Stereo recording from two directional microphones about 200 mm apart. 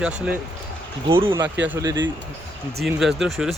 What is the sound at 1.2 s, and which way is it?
Speech, 25° right (ahead or behind).